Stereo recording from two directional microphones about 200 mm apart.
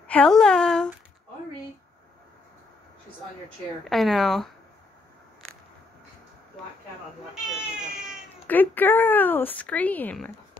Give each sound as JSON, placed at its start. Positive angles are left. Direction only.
{"t": 0.0, "sound": "a woman's voice", "side_deg": 5}
{"t": 3.8, "sound": "a woman's voice", "side_deg": 0}
{"t": 7.6, "sound": "baby cry", "side_deg": -5}
{"t": 8.5, "sound": "speech", "side_deg": 10}